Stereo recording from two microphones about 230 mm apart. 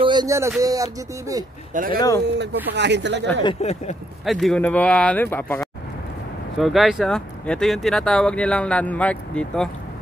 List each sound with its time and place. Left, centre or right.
0.0 s a sound: centre
1.7 s speech: right
2.0 s speech: centre
2.2 s speech: right
3.4 s speech: left
4.3 s speech: centre